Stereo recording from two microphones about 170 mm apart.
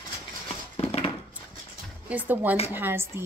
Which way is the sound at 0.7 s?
35° left (ahead or behind).